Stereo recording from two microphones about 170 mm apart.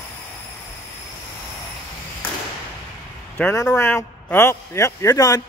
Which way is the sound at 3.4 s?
15° left (ahead or behind).